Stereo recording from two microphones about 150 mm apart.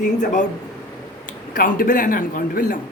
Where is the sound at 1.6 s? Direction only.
65° left (ahead or behind).